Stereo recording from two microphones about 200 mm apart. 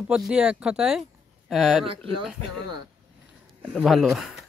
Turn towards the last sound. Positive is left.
turn(degrees=0)  # may be behind; listen again after turning